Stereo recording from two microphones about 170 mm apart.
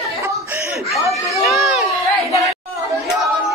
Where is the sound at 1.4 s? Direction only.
Centre (ahead or behind).